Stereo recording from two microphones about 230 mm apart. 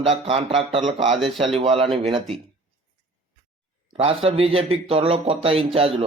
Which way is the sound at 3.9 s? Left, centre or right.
Right.